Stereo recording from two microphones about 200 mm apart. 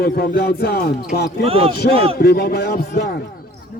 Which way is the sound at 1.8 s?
50° left (ahead or behind).